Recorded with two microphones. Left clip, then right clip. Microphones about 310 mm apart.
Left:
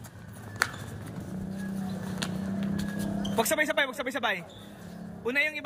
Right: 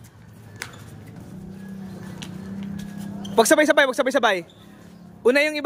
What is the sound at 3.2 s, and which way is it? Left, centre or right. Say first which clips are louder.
A man's voice: right 11 dB; centre.